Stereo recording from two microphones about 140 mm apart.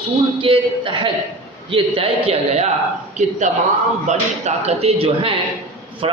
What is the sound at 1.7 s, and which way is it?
Speech, 45° right (ahead or behind).